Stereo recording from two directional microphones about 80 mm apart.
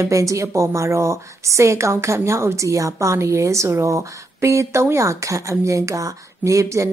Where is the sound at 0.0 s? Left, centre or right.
Right.